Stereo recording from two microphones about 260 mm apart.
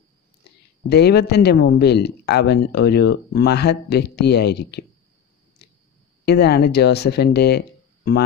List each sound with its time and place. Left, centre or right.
0.8 s speech: left
6.2 s speech: left